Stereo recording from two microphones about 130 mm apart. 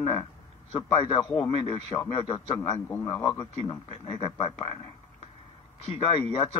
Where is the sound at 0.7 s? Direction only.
40° left (ahead or behind).